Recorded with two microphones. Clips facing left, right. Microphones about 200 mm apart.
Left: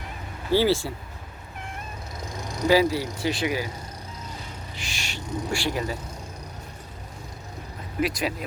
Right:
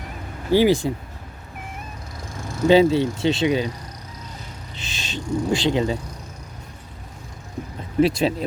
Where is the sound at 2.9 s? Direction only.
25° right (ahead or behind).